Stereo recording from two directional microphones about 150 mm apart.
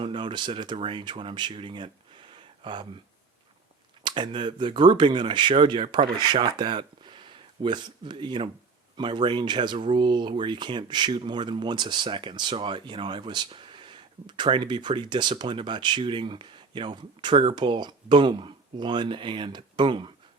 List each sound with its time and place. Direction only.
0.0 s speech: 35° right (ahead or behind)
2.3 s a sound: 30° right (ahead or behind)
4.0 s speech: 35° right (ahead or behind)